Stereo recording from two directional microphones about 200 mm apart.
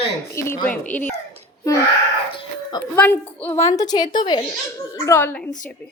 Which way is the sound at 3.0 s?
5° left (ahead or behind).